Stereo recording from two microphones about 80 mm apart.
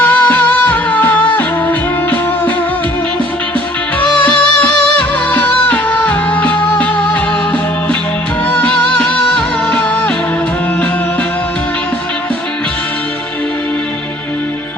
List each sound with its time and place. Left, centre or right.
0.0 s music: centre
4.2 s music: centre